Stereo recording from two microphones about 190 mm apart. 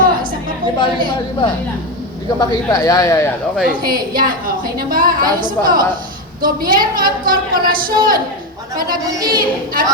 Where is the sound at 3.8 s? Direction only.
50° right (ahead or behind).